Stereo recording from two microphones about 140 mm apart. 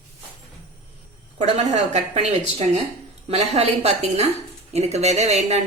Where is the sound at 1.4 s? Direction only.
55° right (ahead or behind).